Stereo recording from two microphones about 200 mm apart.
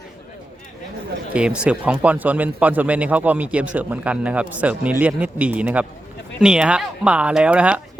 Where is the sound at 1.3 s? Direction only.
5° right (ahead or behind).